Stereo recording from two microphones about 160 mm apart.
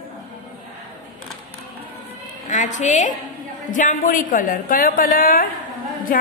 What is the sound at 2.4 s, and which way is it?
A woman's voice, 50° left (ahead or behind).